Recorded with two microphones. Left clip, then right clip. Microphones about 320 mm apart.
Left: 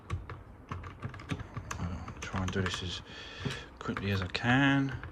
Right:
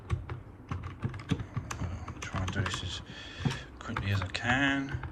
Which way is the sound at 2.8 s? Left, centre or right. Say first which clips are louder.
Even; centre.